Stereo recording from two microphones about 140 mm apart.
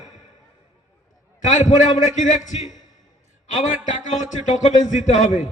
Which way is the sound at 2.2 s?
65° left (ahead or behind).